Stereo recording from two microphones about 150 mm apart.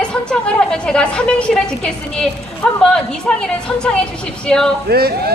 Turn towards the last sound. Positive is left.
turn(degrees=-90)